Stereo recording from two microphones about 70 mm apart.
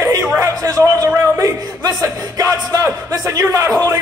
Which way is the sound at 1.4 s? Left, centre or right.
Right.